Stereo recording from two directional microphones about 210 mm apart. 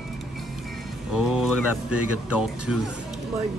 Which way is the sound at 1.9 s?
90° left.